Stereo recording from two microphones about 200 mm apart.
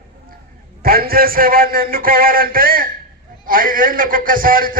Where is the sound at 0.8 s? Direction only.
45° right (ahead or behind).